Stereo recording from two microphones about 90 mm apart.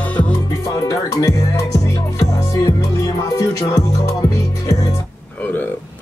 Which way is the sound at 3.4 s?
40° left (ahead or behind).